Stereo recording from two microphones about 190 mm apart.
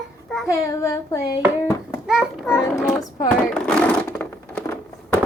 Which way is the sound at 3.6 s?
5° left (ahead or behind).